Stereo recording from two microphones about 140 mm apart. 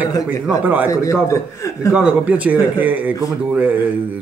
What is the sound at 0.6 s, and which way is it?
Speech, 10° right (ahead or behind).